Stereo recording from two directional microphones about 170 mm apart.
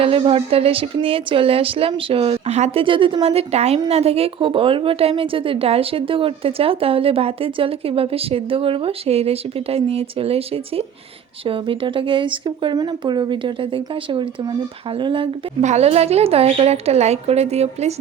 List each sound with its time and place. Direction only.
0.0 s a woman's voice: 35° right (ahead or behind)
15.6 s a woman's voice: 40° right (ahead or behind)